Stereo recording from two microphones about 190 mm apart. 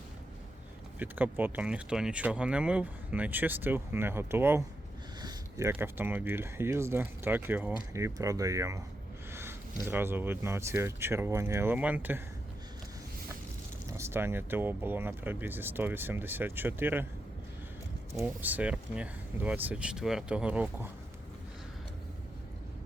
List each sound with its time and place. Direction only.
0.9 s speech: 10° right (ahead or behind)
9.3 s a sound: 10° right (ahead or behind)
9.8 s speech: 10° right (ahead or behind)
13.9 s speech: 15° right (ahead or behind)
18.2 s speech: 10° right (ahead or behind)